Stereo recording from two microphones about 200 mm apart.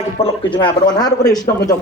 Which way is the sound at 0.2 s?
25° left (ahead or behind).